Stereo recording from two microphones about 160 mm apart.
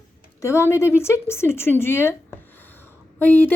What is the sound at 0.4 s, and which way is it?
A woman's voice, 15° left (ahead or behind).